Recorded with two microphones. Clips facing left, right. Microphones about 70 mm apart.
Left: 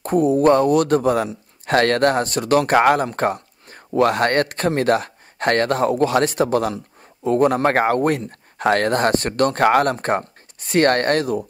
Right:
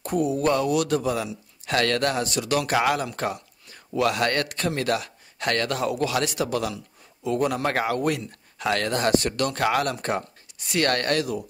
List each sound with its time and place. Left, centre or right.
0.0 s a man's voice: left